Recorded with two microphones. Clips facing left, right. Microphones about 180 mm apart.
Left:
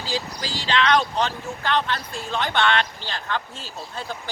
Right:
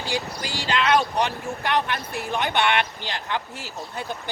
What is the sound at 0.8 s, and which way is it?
Speech, 5° right (ahead or behind).